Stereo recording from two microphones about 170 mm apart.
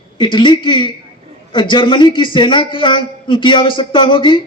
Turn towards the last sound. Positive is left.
turn(degrees=30)  # may be behind; listen again after turning